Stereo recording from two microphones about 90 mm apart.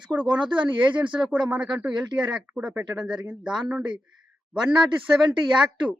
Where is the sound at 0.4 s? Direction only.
60° right (ahead or behind).